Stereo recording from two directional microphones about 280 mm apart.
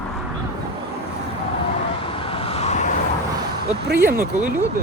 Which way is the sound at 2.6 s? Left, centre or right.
Left.